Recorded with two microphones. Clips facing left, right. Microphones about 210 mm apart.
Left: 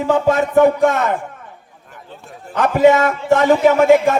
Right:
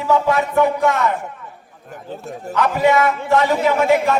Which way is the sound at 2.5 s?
50° left (ahead or behind).